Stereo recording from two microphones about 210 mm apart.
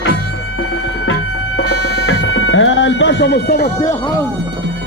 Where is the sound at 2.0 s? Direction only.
65° left (ahead or behind); by 3.6 s 50° left (ahead or behind).